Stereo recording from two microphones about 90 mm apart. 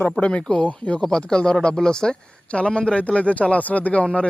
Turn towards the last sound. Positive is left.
turn(degrees=15)  # may be behind; listen again after turning